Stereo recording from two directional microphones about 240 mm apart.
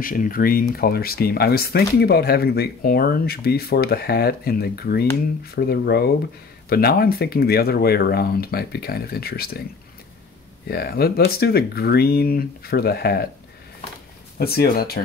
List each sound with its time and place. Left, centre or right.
0.0 s speech: left
10.7 s speech: left
14.4 s speech: left